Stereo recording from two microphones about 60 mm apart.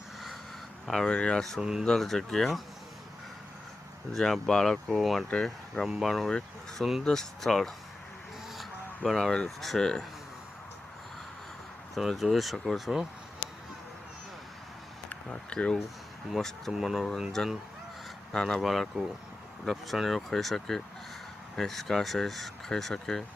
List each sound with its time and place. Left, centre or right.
0.9 s speech: centre
4.1 s speech: centre
5.3 s speech: centre
5.8 s speech: centre
9.0 s speech: centre
11.9 s speech: centre
15.1 s speech: centre
16.4 s speech: centre
16.7 s speech: centre
18.3 s speech: centre